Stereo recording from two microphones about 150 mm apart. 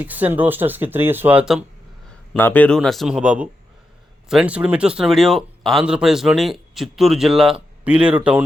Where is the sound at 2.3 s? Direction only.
10° left (ahead or behind).